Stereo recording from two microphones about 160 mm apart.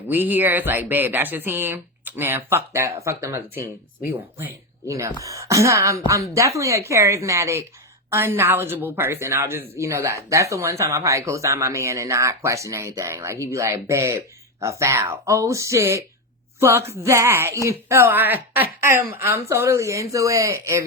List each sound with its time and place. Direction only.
0.1 s a woman's voice: 10° right (ahead or behind)